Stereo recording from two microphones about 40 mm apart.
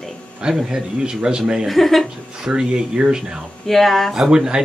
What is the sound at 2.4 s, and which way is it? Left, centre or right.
Speech, right.